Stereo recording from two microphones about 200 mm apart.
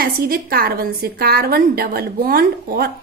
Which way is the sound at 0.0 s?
45° right (ahead or behind).